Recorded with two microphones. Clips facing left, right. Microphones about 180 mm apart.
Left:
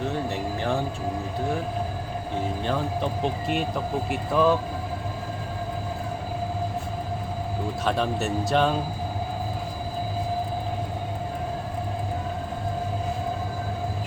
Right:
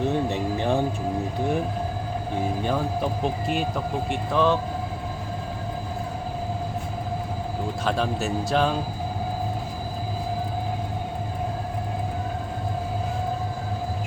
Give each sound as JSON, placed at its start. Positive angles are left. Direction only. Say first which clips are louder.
{"t": 0.3, "sound": "a sound", "louder": "right 3 dB", "side_deg": -20}
{"t": 2.6, "sound": "speech", "louder": "right 1 dB", "side_deg": -5}
{"t": 7.9, "sound": "speech", "louder": "even", "side_deg": 0}